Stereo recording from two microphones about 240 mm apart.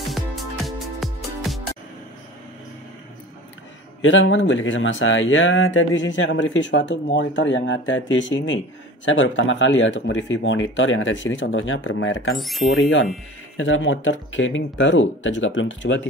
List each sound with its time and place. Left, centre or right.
0.7 s music: centre
4.0 s speech: left
12.4 s speech: centre
12.6 s speech: left